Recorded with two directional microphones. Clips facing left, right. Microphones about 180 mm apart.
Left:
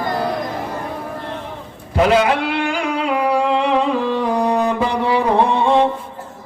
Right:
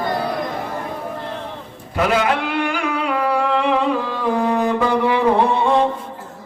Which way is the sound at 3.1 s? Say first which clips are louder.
Left 2 dB; 20° left (ahead or behind).